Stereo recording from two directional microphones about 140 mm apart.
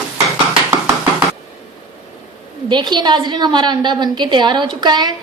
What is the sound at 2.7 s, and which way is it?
A woman's voice, 30° right (ahead or behind).